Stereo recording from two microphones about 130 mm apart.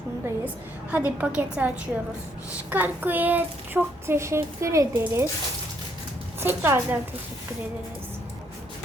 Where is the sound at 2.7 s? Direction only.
15° right (ahead or behind).